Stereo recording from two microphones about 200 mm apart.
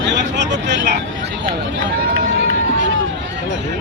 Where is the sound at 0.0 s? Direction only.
60° right (ahead or behind).